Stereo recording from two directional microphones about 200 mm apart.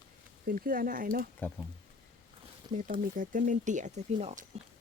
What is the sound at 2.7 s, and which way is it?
Speech, 20° right (ahead or behind).